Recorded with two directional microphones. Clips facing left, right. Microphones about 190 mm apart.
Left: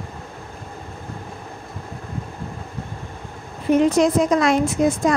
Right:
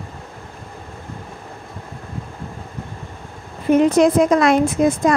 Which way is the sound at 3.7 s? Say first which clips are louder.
Right 3 dB; 55° right (ahead or behind).